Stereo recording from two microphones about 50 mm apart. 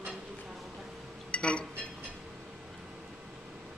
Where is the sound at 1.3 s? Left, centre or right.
Left.